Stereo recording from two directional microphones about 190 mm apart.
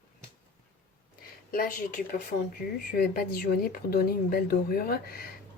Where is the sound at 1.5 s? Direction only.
50° left (ahead or behind).